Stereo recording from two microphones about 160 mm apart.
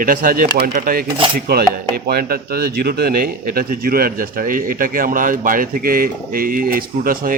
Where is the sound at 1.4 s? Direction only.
75° right (ahead or behind).